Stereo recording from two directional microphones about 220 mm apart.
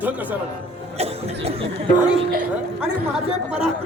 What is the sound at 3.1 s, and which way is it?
Speech, 5° right (ahead or behind).